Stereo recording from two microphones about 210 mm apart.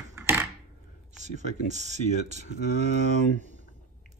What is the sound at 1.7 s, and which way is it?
Speech, 35° right (ahead or behind).